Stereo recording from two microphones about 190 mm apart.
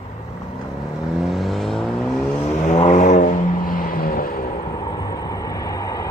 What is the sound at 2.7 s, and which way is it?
Vehicle, 35° left (ahead or behind).